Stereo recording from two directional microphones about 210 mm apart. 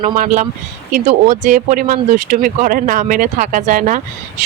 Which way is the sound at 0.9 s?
35° right (ahead or behind).